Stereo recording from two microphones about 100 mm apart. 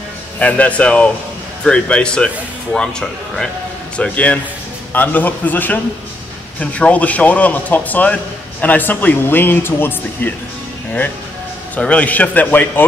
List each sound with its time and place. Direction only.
0.4 s a man's voice: 15° left (ahead or behind)
11.7 s a man's voice: 15° left (ahead or behind)